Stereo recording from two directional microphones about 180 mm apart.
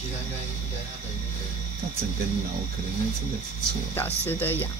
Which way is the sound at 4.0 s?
10° left (ahead or behind).